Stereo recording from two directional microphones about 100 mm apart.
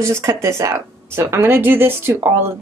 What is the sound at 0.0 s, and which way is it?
Speech, 30° right (ahead or behind).